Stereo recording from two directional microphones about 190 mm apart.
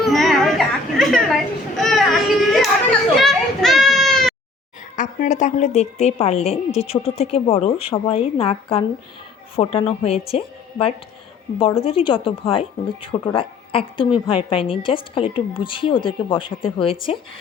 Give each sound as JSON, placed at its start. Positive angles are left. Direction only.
{"t": 0.1, "sound": "chatter", "side_deg": 0}
{"t": 0.9, "sound": "children playing", "side_deg": 0}
{"t": 4.9, "sound": "a woman's voice", "side_deg": 40}